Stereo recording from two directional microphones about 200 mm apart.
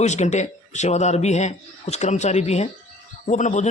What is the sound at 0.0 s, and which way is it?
A man's voice, 35° left (ahead or behind).